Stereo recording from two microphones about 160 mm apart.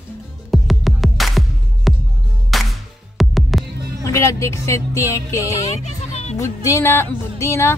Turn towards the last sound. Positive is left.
turn(degrees=15)  # may be behind; listen again after turning